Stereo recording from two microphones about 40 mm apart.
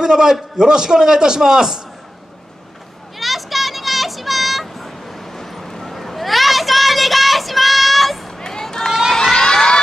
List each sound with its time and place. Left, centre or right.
0.0 s a man's voice: centre
3.2 s a sound: centre
8.4 s run: centre
9.1 s crowd: centre